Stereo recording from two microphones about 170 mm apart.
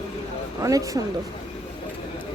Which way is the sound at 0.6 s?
20° right (ahead or behind).